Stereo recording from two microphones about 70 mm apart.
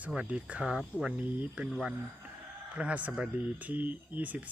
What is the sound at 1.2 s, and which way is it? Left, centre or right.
Speech, right.